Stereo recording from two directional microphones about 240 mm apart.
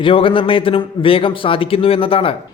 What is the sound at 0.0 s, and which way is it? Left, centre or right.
A man's voice, left.